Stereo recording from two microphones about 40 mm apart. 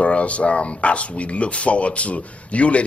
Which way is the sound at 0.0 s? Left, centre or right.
Left.